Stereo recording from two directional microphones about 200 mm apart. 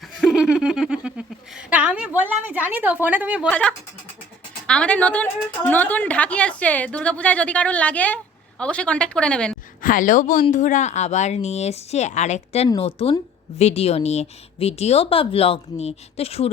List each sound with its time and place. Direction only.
0.2 s a sound: 5° right (ahead or behind)
3.5 s a woman's voice: 5° left (ahead or behind)
9.8 s speech: 40° left (ahead or behind)